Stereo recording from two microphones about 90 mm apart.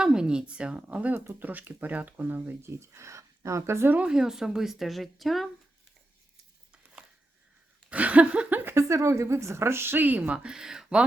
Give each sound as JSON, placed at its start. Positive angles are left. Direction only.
{"t": 0.0, "sound": "a woman's voice", "side_deg": -10}
{"t": 3.9, "sound": "speech", "side_deg": -10}
{"t": 7.9, "sound": "a woman's voice", "side_deg": -15}